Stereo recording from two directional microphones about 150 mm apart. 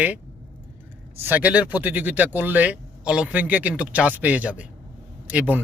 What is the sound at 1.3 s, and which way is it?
A man's voice, 10° right (ahead or behind).